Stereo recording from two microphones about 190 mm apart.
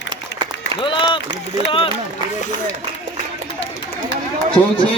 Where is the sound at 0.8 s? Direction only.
25° left (ahead or behind).